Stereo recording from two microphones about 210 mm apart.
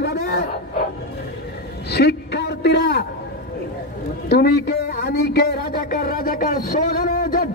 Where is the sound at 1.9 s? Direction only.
50° left (ahead or behind).